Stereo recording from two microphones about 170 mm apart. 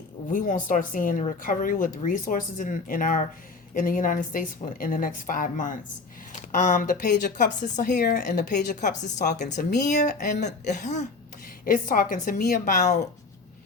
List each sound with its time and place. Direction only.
0.3 s speech: 50° left (ahead or behind)
11.6 s a woman's voice: 55° left (ahead or behind)
12.5 s speech: 45° left (ahead or behind)